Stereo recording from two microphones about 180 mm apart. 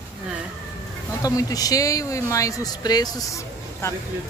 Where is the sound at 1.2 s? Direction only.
20° left (ahead or behind).